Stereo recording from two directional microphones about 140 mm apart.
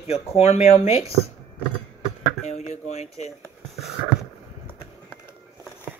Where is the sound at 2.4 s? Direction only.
50° left (ahead or behind).